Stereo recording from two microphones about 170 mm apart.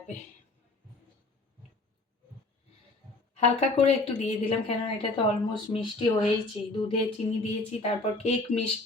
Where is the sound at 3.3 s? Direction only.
40° left (ahead or behind).